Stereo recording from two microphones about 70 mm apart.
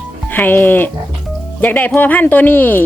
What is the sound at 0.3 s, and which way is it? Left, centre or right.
Speech, left.